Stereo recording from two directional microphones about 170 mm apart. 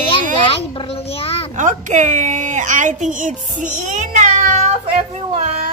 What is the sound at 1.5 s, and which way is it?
A woman's voice, 50° right (ahead or behind).